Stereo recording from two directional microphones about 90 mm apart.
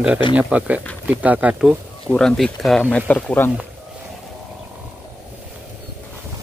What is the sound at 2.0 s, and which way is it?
Speech, 5° left (ahead or behind).